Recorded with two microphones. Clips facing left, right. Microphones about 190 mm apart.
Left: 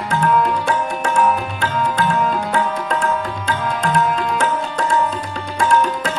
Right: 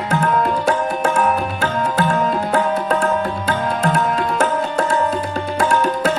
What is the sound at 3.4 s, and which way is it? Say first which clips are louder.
Music: right 2 dB; 45° right (ahead or behind).